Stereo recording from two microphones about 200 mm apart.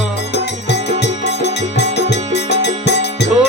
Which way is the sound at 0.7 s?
60° left (ahead or behind).